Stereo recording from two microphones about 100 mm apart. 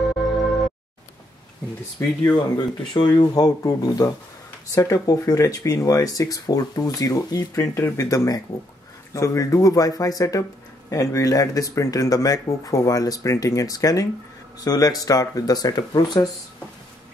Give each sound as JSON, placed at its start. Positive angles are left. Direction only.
{"t": 0.0, "sound": "music", "side_deg": 0}
{"t": 2.0, "sound": "speech", "side_deg": 25}
{"t": 2.9, "sound": "speech", "side_deg": 50}